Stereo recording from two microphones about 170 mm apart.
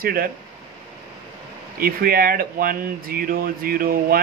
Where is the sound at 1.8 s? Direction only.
60° right (ahead or behind).